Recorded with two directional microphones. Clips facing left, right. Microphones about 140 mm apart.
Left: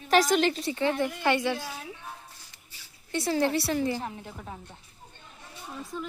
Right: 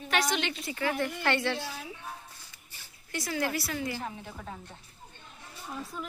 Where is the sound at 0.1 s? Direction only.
40° left (ahead or behind); by 1.5 s 15° left (ahead or behind).